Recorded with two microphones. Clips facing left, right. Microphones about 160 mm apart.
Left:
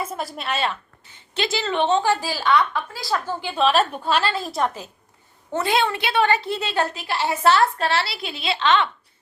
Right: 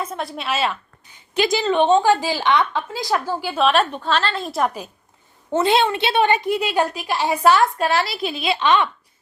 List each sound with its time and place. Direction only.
0.0 s a woman's voice: 5° left (ahead or behind)
1.0 s a woman's voice: 15° right (ahead or behind)
5.5 s a woman's voice: 20° right (ahead or behind)